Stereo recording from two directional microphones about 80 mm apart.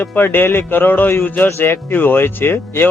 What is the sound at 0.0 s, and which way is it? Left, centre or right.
Speech, left.